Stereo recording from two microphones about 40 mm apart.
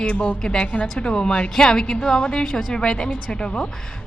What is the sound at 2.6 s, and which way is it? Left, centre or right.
Speech, centre.